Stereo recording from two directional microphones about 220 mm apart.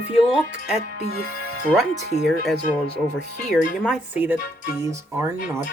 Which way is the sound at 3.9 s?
5° right (ahead or behind).